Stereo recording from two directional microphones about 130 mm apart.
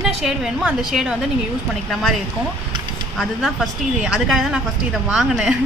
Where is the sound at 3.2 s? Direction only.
Centre (ahead or behind).